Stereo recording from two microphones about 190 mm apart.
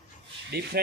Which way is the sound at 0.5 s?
60° right (ahead or behind).